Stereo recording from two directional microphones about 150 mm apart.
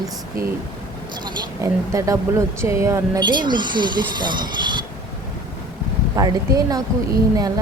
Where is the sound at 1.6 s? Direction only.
20° right (ahead or behind).